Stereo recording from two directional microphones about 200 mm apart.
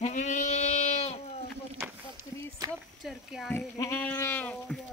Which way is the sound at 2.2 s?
20° right (ahead or behind).